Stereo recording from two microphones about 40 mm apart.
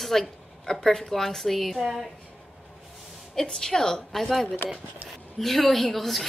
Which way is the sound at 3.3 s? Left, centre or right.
Centre.